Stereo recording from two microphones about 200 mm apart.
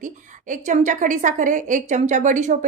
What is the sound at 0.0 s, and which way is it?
A woman's voice, 40° right (ahead or behind).